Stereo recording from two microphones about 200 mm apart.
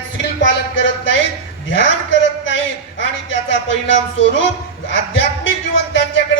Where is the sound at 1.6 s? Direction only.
65° left (ahead or behind).